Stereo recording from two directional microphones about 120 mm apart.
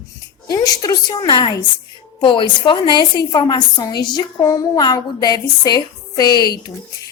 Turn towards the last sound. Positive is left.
turn(degrees=35)  # may be behind; listen again after turning